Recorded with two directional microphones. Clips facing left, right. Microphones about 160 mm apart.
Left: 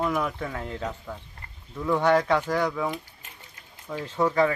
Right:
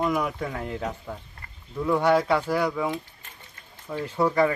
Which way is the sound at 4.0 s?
10° right (ahead or behind).